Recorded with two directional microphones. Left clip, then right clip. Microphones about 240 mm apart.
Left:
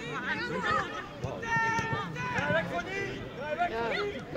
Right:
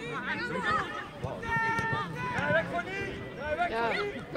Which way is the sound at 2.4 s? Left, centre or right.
Left.